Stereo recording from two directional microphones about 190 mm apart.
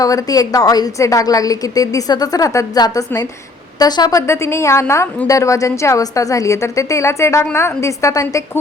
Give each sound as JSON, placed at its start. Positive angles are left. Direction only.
{"t": 0.0, "sound": "a woman's voice", "side_deg": 20}